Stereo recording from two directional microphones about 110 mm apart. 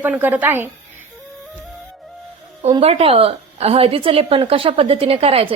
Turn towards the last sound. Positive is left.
turn(degrees=-60)  # may be behind; listen again after turning